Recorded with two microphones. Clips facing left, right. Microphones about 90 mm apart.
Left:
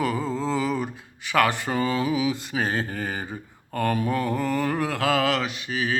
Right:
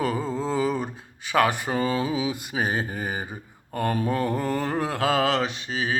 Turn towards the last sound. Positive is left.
turn(degrees=-25)  # may be behind; listen again after turning